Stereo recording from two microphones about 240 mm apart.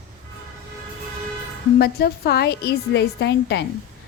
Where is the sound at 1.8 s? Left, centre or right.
Left.